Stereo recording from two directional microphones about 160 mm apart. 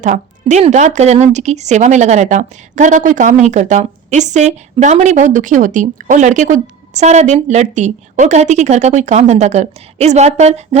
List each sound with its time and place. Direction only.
0.0 s speech: 50° right (ahead or behind)